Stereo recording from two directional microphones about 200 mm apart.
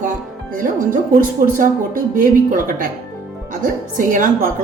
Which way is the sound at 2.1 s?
40° right (ahead or behind).